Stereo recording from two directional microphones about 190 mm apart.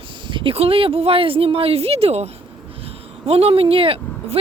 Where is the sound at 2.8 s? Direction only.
30° right (ahead or behind).